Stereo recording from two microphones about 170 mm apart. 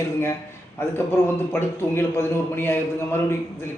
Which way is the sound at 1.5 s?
15° left (ahead or behind).